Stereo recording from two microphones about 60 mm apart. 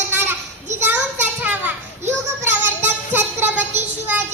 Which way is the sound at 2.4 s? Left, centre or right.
Right.